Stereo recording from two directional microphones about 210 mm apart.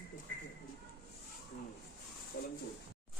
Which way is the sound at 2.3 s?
50° left (ahead or behind).